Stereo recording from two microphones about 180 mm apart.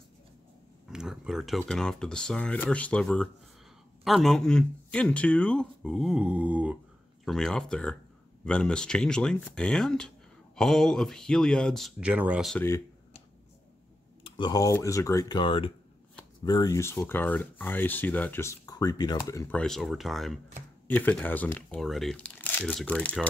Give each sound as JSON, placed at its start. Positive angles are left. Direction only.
{"t": 0.8, "sound": "speech", "side_deg": -5}
{"t": 12.5, "sound": "speech", "side_deg": 15}
{"t": 14.2, "sound": "speech", "side_deg": 25}
{"t": 19.5, "sound": "speech", "side_deg": 5}